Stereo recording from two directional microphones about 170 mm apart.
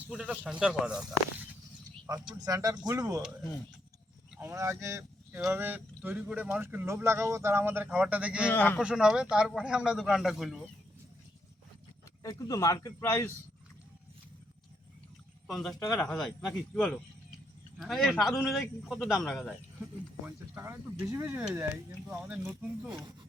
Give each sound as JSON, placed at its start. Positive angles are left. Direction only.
{"t": 0.1, "sound": "speech", "side_deg": 0}
{"t": 2.0, "sound": "speech", "side_deg": -20}
{"t": 4.4, "sound": "speech", "side_deg": -15}
{"t": 8.4, "sound": "speech", "side_deg": 10}
{"t": 8.8, "sound": "speech", "side_deg": -5}
{"t": 12.2, "sound": "a man's voice", "side_deg": 20}
{"t": 15.4, "sound": "speech", "side_deg": 0}
{"t": 20.2, "sound": "speech", "side_deg": -15}